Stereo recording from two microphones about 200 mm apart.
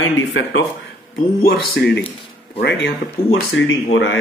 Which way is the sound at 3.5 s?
70° left (ahead or behind).